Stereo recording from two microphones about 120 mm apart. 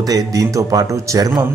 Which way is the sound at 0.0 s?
30° right (ahead or behind).